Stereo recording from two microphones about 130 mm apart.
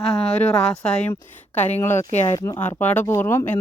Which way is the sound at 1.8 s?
20° left (ahead or behind).